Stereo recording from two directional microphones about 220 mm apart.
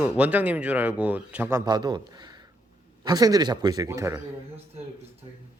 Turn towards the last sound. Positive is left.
turn(degrees=-15)  # may be behind; listen again after turning